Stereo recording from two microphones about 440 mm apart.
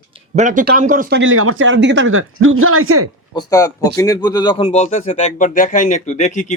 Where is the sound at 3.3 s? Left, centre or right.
Centre.